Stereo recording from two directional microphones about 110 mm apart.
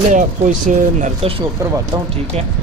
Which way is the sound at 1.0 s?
65° right (ahead or behind).